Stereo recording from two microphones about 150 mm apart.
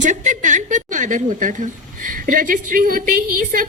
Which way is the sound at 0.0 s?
55° right (ahead or behind).